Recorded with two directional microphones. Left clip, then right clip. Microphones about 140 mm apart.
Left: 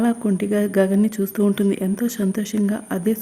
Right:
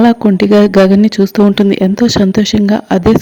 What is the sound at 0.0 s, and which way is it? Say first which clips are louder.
Speech: right 12 dB; 40° right (ahead or behind).